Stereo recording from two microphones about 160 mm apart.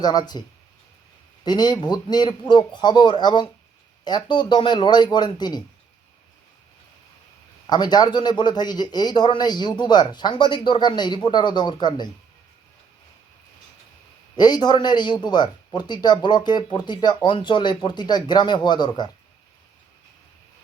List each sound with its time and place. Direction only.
0.0 s speech: 25° left (ahead or behind)
1.5 s speech: 25° left (ahead or behind)
7.7 s speech: 25° left (ahead or behind)
14.3 s speech: 25° left (ahead or behind)